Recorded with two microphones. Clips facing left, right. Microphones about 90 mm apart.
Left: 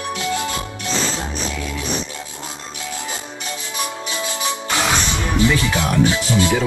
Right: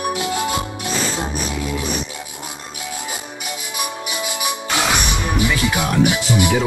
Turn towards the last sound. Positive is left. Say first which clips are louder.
# even
turn(degrees=-15)  # may be behind; listen again after turning